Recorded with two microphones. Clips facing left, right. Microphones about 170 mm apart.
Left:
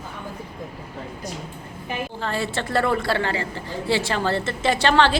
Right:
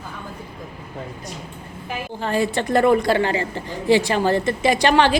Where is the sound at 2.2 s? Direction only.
15° right (ahead or behind).